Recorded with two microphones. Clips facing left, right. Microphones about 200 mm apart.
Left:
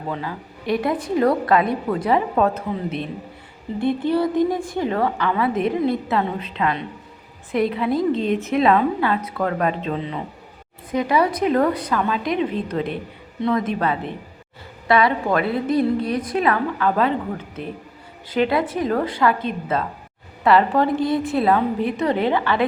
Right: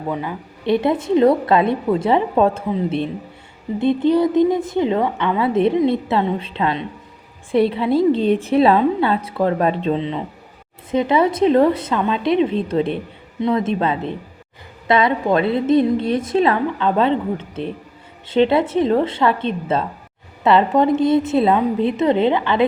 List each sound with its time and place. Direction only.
0.1 s a woman's voice: 20° right (ahead or behind)